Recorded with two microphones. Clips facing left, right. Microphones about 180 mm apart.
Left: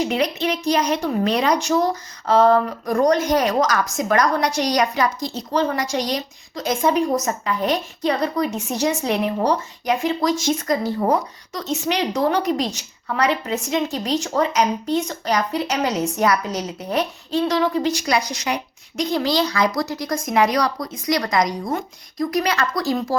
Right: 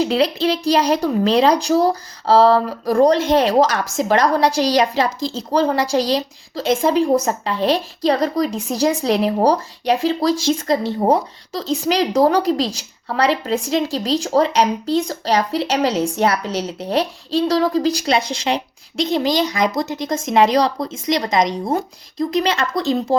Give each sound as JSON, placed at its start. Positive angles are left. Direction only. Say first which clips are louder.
{"t": 0.0, "sound": "a woman's voice", "louder": "right 4 dB", "side_deg": -35}